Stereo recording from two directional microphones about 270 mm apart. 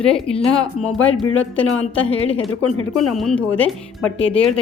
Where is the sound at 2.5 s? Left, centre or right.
Left.